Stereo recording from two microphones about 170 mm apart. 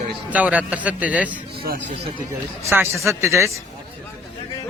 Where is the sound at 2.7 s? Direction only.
15° right (ahead or behind).